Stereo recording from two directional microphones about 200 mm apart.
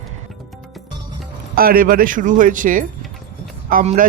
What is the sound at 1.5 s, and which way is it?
Speech, 45° right (ahead or behind).